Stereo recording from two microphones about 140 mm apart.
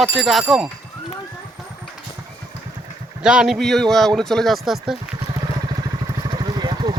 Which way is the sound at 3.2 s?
5° right (ahead or behind).